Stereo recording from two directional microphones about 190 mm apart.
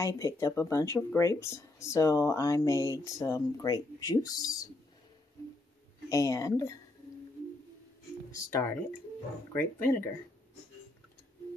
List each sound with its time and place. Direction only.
0.0 s speech: 15° left (ahead or behind)
6.0 s speech: 15° left (ahead or behind)
8.5 s speech: 15° left (ahead or behind)